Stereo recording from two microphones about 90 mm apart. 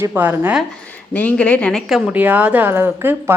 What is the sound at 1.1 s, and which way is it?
Speech, 15° left (ahead or behind).